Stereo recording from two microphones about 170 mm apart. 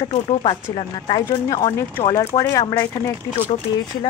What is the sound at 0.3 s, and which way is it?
Speech, 35° left (ahead or behind).